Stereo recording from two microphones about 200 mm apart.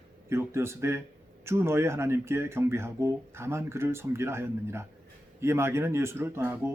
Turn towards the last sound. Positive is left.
turn(degrees=-10)  # may be behind; listen again after turning